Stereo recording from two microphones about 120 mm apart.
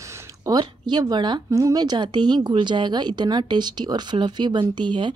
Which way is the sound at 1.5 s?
30° right (ahead or behind).